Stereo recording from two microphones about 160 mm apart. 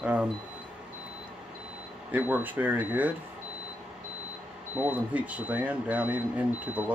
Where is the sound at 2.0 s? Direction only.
10° right (ahead or behind).